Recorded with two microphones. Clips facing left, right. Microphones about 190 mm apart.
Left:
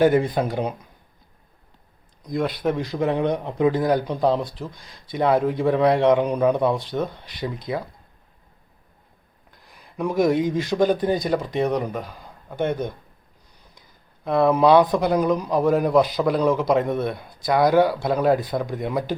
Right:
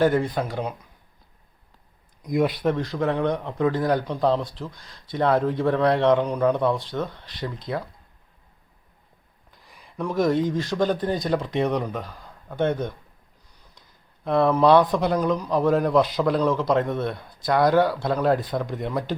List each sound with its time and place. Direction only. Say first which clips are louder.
0.0 s speech: left 3 dB; 15° left (ahead or behind)
2.2 s speech: right 2 dB; 10° right (ahead or behind)
2.6 s speech: left 1 dB; 10° left (ahead or behind)
9.6 s a sound: even; 5° left (ahead or behind)
10.0 s speech: left 2 dB; 15° left (ahead or behind)
14.3 s speech: left 1 dB; 5° left (ahead or behind)